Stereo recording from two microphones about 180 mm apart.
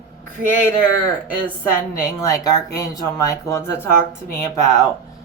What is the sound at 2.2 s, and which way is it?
Speech, 20° left (ahead or behind).